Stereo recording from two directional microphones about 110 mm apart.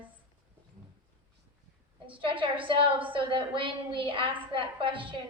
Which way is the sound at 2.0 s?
50° right (ahead or behind).